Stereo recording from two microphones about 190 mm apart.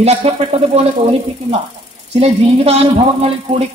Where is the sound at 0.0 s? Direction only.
35° right (ahead or behind).